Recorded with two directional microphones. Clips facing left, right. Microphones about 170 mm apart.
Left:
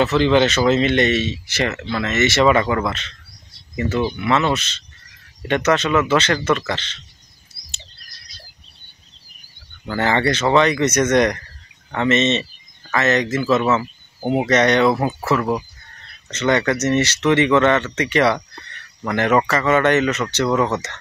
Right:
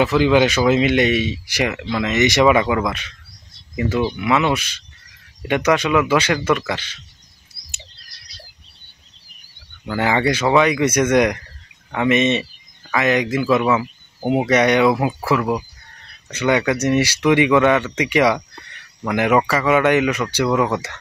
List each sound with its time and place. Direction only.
0.0 s speech: 10° right (ahead or behind)
9.8 s speech: 10° right (ahead or behind)